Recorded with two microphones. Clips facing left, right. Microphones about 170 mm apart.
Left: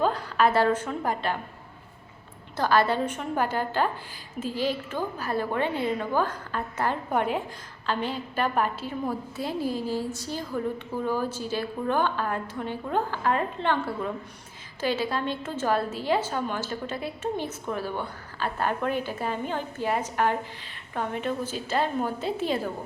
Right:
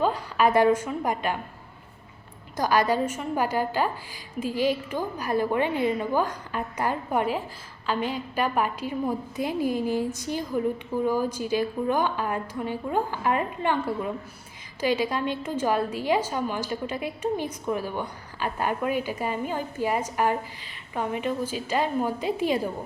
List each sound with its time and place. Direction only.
0.0 s a woman's voice: 10° right (ahead or behind)
2.6 s a woman's voice: 10° right (ahead or behind)